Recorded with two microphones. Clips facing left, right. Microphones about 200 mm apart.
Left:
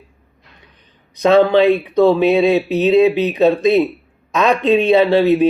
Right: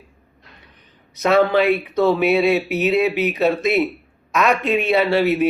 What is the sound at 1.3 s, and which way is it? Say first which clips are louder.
Speech: left 4 dB; 20° left (ahead or behind).